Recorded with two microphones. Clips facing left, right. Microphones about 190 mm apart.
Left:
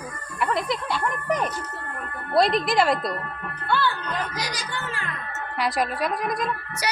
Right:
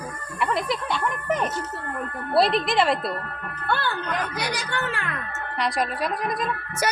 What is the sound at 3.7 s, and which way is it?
A child's voice, 50° right (ahead or behind).